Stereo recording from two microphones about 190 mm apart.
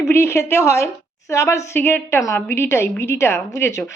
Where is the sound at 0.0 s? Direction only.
15° left (ahead or behind).